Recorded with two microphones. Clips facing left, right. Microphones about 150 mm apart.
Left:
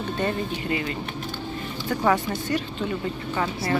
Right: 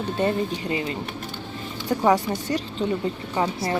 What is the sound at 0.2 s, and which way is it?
Speech, 25° right (ahead or behind).